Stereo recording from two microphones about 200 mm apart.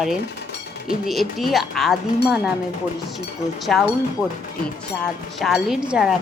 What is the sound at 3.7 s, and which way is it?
Speech, centre (ahead or behind).